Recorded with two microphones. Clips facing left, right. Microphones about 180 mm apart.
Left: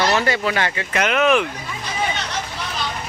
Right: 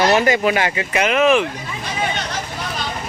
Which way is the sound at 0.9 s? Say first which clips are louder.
Right 2 dB; 5° right (ahead or behind).